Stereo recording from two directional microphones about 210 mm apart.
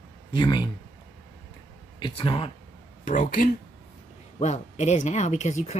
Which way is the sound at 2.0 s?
25° left (ahead or behind).